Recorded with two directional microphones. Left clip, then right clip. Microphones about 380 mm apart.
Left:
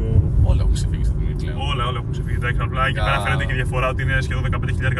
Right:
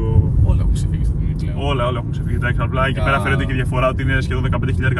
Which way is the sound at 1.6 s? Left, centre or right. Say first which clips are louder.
Right 4 dB; centre.